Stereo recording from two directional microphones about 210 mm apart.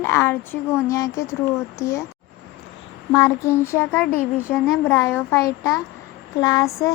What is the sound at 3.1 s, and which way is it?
A child's voice, 15° left (ahead or behind).